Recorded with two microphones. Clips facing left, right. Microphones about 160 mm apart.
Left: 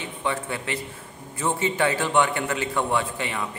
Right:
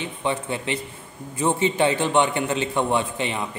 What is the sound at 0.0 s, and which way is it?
A man's voice, 20° right (ahead or behind).